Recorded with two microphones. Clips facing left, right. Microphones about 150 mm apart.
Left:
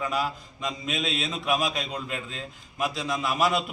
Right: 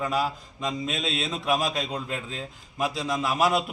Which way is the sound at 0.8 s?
30° right (ahead or behind).